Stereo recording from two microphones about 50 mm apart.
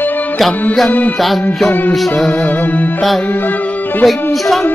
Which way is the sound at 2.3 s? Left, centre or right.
Left.